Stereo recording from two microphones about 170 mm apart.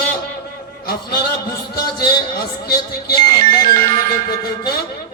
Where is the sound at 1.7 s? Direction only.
60° left (ahead or behind).